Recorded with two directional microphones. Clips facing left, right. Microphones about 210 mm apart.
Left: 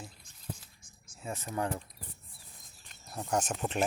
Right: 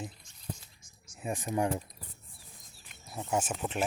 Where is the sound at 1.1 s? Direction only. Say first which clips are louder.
Right 4 dB; 15° right (ahead or behind).